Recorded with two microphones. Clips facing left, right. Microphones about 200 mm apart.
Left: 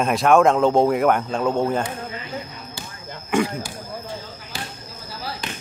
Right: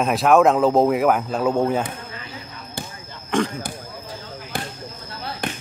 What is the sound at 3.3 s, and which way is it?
Speech, 10° left (ahead or behind).